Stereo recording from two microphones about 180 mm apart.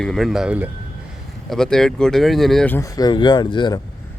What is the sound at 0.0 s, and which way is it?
Speech, centre (ahead or behind).